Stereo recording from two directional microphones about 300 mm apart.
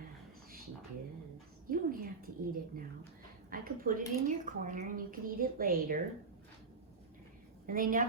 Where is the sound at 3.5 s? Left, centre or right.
Right.